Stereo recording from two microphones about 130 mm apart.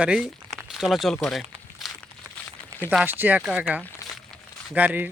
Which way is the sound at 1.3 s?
Centre (ahead or behind).